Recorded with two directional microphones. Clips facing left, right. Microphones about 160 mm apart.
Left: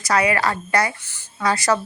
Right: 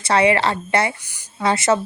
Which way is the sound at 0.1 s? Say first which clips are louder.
Right 3 dB; 25° right (ahead or behind).